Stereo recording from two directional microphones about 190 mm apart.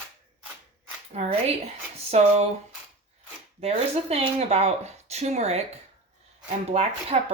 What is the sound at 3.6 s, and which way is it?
Speech, 30° right (ahead or behind).